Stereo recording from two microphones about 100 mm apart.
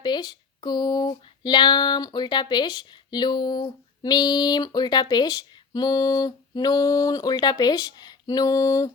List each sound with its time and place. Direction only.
0.0 s speech: 45° left (ahead or behind)